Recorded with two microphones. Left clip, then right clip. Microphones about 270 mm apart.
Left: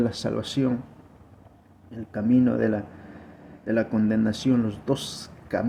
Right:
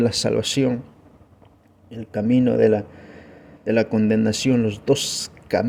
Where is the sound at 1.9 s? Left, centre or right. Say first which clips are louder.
Right 3 dB; right.